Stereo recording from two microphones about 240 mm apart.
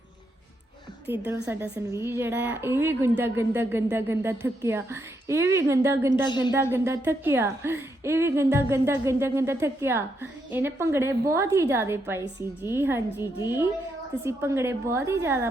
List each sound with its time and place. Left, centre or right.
1.2 s a woman's voice: centre
6.2 s speech: centre
6.7 s a woman's voice: centre
14.3 s a woman's voice: centre